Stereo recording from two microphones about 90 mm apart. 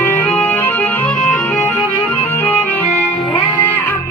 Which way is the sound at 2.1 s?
20° left (ahead or behind).